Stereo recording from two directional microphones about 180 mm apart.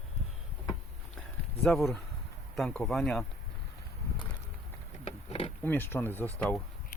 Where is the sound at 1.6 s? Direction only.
Centre (ahead or behind).